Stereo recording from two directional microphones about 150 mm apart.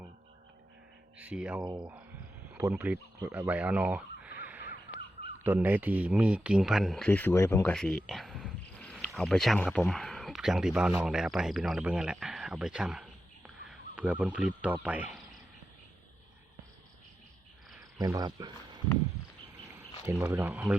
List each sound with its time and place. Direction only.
1.2 s speech: 5° right (ahead or behind)
1.6 s speech: 30° right (ahead or behind)
2.6 s speech: 15° right (ahead or behind)
3.2 s a sound: 10° right (ahead or behind)
5.4 s speech: 15° right (ahead or behind)
18.0 s speech: 25° right (ahead or behind)
20.1 s speech: 15° right (ahead or behind)